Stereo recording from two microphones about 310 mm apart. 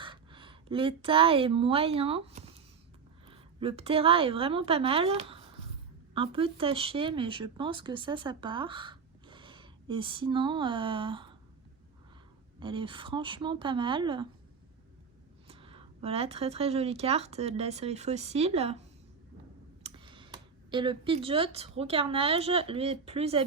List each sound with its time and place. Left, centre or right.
0.0 s a woman's voice: centre
12.5 s speech: centre
15.4 s speech: centre
19.8 s speech: centre